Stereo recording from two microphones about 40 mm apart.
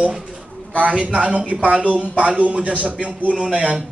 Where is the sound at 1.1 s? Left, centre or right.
Right.